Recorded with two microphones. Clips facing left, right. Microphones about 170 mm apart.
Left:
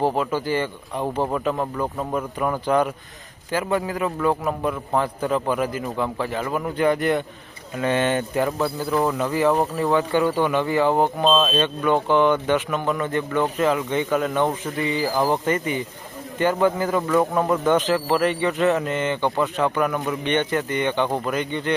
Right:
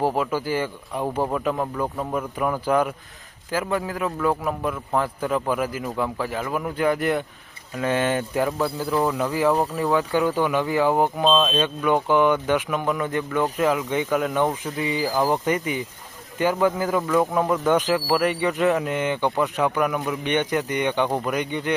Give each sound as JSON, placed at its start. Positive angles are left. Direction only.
{"t": 0.0, "sound": "a man's voice", "side_deg": -10}
{"t": 8.5, "sound": "a man's voice", "side_deg": 10}
{"t": 9.1, "sound": "a man's voice", "side_deg": -10}
{"t": 11.3, "sound": "a man's voice", "side_deg": 5}
{"t": 11.6, "sound": "a man's voice", "side_deg": -10}